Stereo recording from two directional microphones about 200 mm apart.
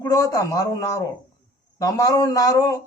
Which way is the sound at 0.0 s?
15° left (ahead or behind).